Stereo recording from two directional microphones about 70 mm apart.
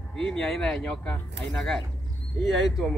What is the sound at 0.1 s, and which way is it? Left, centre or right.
Speech, centre.